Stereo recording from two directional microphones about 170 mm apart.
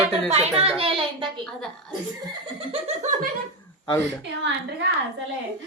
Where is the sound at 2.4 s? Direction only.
35° right (ahead or behind).